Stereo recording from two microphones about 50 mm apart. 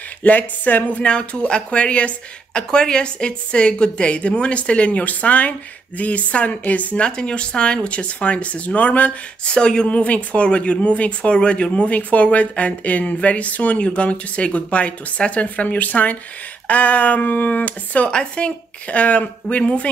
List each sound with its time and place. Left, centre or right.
0.2 s speech: left
1.0 s speech: left
7.1 s speech: centre
9.5 s speech: centre